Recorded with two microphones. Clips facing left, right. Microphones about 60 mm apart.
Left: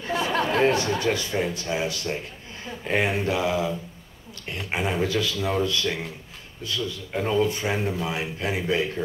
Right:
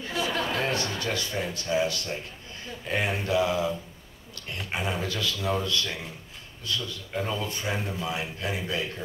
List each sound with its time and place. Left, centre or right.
0.0 s a man's voice: left
7.2 s a man's voice: left